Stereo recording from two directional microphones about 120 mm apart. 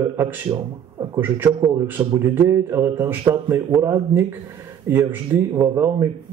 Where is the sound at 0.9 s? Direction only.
20° right (ahead or behind).